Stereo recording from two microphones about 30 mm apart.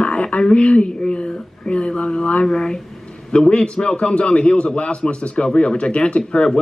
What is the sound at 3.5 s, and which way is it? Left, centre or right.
Speech, left.